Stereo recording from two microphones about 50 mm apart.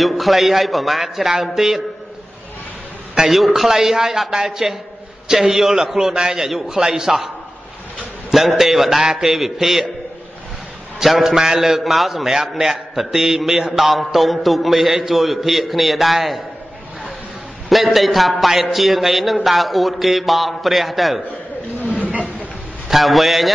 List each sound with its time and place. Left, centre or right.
0.0 s a man's voice: centre
3.2 s a man's voice: centre
8.3 s a man's voice: centre
11.0 s a man's voice: centre
17.6 s a man's voice: centre
21.3 s a sound: left
22.1 s a sound: right
22.8 s a man's voice: centre